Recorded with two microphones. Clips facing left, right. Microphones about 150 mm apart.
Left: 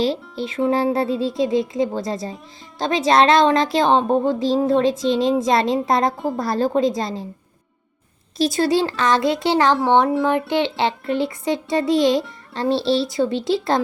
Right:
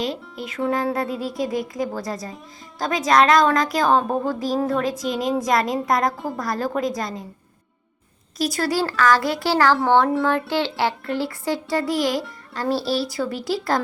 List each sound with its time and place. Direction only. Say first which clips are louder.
0.0 s a child's voice: left 6 dB; 30° left (ahead or behind)
8.4 s a child's voice: left 4 dB; 25° left (ahead or behind)